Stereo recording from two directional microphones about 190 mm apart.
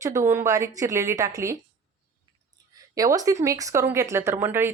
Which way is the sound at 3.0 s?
20° right (ahead or behind).